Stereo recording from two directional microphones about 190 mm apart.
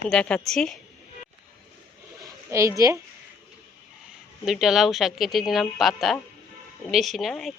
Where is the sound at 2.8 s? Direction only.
15° right (ahead or behind).